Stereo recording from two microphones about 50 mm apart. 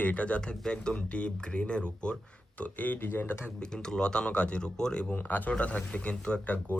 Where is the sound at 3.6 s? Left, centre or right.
Centre.